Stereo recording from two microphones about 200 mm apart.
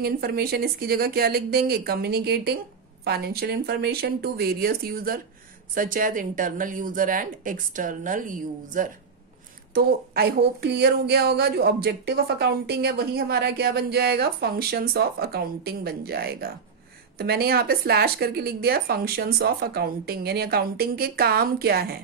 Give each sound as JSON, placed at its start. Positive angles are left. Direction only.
{"t": 0.0, "sound": "a woman's voice", "side_deg": -50}